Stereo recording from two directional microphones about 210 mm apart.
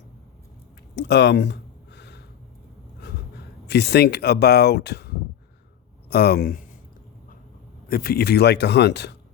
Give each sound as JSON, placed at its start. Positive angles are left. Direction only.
{"t": 0.9, "sound": "a sound", "side_deg": 55}
{"t": 3.7, "sound": "speech", "side_deg": 50}
{"t": 7.9, "sound": "speech", "side_deg": 45}